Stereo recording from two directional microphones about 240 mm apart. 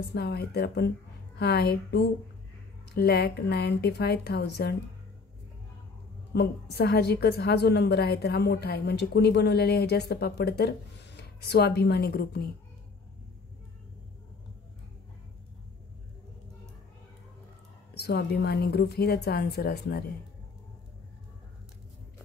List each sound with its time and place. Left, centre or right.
0.1 s a woman's voice: left
6.3 s a woman's voice: left
17.9 s a woman's voice: left